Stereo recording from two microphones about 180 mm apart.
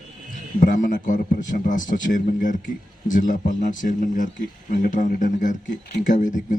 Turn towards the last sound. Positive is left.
turn(degrees=45)  # may be behind; listen again after turning